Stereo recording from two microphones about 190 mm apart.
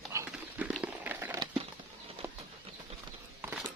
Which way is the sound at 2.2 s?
10° right (ahead or behind).